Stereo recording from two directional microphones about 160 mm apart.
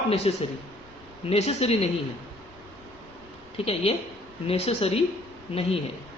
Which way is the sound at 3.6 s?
40° left (ahead or behind).